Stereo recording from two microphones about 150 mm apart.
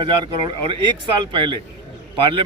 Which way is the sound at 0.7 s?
30° right (ahead or behind).